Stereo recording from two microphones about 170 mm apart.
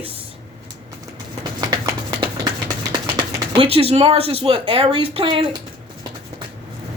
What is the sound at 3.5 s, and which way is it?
Speech, 35° right (ahead or behind).